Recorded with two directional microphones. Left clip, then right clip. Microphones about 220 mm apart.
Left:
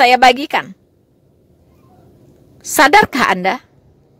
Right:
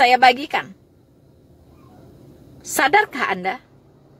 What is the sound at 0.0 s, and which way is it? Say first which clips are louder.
Speech: left 4 dB; 45° left (ahead or behind).